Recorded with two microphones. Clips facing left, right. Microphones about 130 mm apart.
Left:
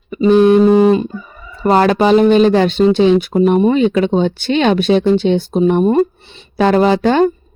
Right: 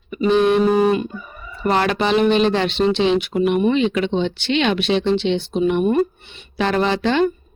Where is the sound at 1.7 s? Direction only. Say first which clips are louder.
Left 7 dB; 40° left (ahead or behind).